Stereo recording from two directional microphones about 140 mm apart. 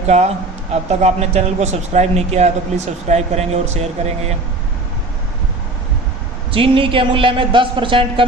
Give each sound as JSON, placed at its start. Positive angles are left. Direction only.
{"t": 0.7, "sound": "speech", "side_deg": -50}
{"t": 6.5, "sound": "a man's voice", "side_deg": -40}